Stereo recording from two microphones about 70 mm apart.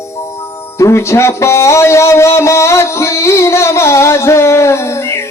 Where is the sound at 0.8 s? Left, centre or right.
Left.